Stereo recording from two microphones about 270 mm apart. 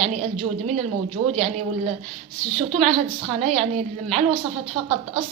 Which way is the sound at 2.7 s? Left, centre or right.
Right.